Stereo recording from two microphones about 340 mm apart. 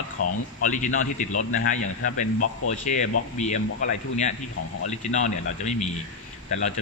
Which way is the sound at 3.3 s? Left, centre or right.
Left.